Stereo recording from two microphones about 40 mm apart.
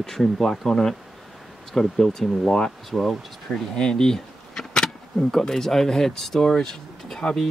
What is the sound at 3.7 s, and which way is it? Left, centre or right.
Speech, centre.